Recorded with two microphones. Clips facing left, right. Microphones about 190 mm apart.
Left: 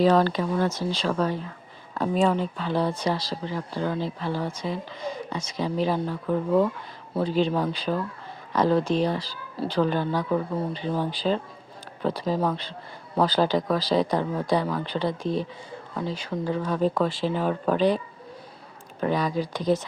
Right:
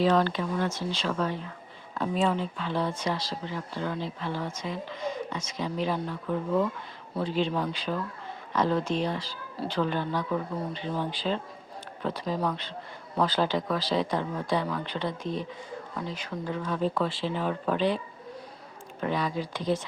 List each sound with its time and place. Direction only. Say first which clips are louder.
0.0 s speech: left 4 dB; 40° left (ahead or behind)